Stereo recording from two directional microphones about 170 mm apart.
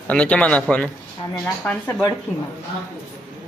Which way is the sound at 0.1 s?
5° left (ahead or behind).